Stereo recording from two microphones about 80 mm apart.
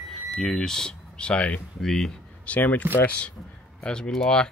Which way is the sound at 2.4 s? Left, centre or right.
Centre.